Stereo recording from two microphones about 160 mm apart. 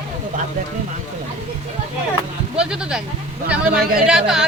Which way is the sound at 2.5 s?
5° right (ahead or behind).